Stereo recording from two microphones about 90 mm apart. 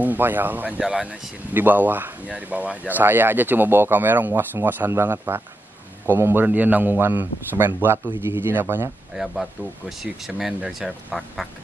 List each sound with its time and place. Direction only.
0.0 s speech: 20° right (ahead or behind)
0.7 s speech: 10° right (ahead or behind)
1.5 s speech: 20° right (ahead or behind)
9.1 s speech: centre (ahead or behind)